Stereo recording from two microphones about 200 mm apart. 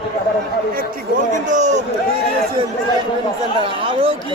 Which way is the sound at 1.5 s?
35° right (ahead or behind).